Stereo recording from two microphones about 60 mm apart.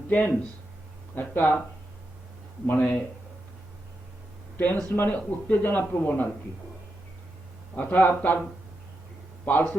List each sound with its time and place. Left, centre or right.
0.1 s speech: left
2.6 s speech: left
4.5 s speech: left
7.8 s speech: left
9.5 s speech: left